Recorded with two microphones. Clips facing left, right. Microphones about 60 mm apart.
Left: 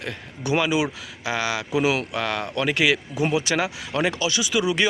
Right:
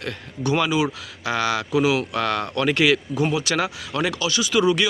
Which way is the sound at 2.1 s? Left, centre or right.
Centre.